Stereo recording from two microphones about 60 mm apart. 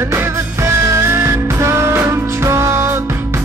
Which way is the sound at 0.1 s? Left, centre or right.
Right.